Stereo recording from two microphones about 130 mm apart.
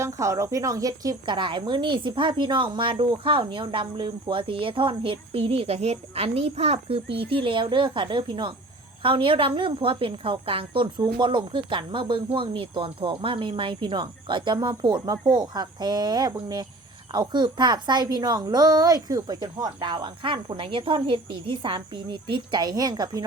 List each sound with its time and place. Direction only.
0.0 s a woman's voice: 25° right (ahead or behind)